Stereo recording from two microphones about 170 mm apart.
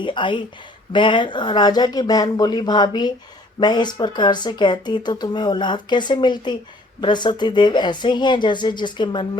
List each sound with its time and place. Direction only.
0.0 s speech: 30° left (ahead or behind)